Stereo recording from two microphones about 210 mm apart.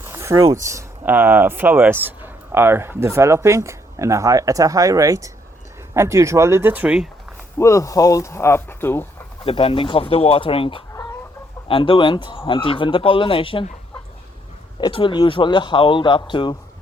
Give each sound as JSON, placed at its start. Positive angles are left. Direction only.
{"t": 0.0, "sound": "speech", "side_deg": -15}
{"t": 7.6, "sound": "speech", "side_deg": 15}
{"t": 9.4, "sound": "speech", "side_deg": 25}
{"t": 14.8, "sound": "speech", "side_deg": 20}